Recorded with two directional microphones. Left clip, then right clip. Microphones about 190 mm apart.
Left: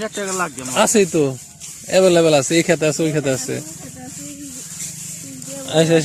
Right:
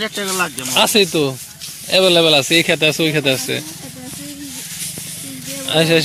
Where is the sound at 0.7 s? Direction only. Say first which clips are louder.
Right 1 dB; 35° left (ahead or behind).